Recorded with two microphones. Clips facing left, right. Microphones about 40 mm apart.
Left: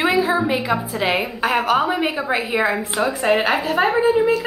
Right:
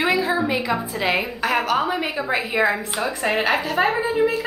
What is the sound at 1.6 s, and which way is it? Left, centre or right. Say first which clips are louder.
Speech: left 3 dB; left.